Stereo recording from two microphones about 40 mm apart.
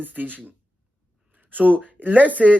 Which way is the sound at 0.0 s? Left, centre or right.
Right.